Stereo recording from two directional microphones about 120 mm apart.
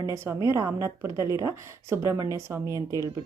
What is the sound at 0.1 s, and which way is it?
Speech, 25° right (ahead or behind).